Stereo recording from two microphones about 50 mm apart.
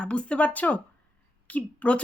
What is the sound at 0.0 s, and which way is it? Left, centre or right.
Speech, left.